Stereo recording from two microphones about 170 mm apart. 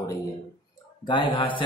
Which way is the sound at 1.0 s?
30° left (ahead or behind).